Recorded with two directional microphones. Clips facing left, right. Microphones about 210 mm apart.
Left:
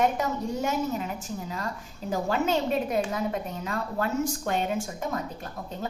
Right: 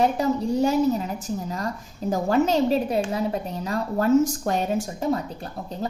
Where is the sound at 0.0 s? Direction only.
35° right (ahead or behind).